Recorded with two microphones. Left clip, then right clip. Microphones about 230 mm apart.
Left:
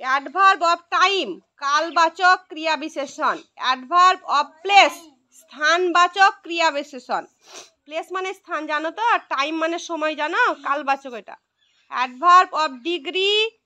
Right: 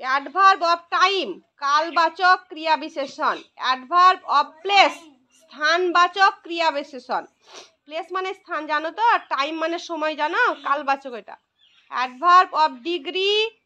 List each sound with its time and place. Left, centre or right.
0.0 s a woman's voice: left